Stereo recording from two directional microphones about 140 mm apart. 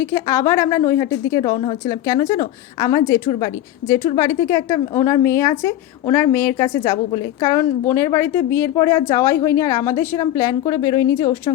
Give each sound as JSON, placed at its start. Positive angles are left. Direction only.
{"t": 0.0, "sound": "a woman's voice", "side_deg": 20}